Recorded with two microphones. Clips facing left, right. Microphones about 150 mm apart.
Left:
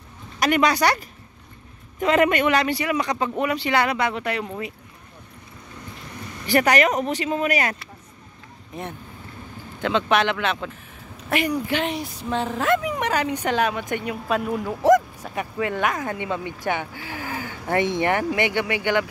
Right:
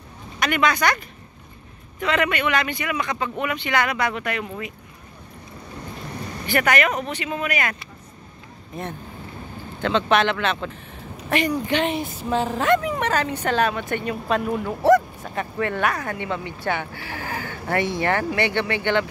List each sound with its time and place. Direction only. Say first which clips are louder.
0.4 s speech: left 2 dB; 35° left (ahead or behind)
6.4 s speech: left 2 dB; 35° left (ahead or behind)
9.8 s speech: right 1 dB; 10° left (ahead or behind)